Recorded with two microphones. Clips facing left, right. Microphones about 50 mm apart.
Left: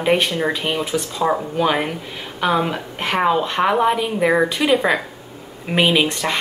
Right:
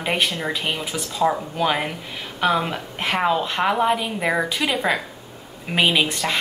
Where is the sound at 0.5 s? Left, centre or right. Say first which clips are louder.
Left 4 dB; centre.